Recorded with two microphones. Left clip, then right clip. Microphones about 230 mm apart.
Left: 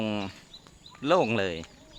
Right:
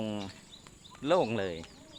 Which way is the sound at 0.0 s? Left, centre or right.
Left.